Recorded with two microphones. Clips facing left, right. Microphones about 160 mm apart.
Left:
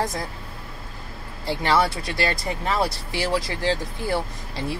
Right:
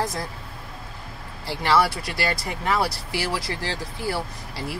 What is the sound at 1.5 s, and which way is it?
Speech, 20° left (ahead or behind).